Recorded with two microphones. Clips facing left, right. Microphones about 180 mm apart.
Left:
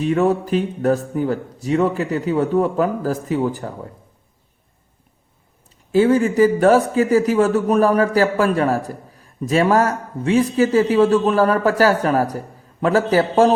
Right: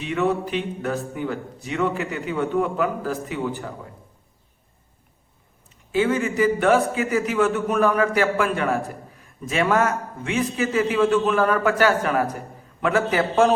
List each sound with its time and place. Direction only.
0.0 s a man's voice: 40° left (ahead or behind)
5.9 s a man's voice: 40° left (ahead or behind)